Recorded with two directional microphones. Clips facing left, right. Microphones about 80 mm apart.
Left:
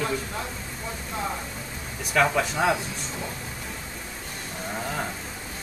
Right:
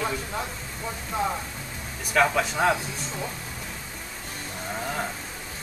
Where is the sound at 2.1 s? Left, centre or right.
Centre.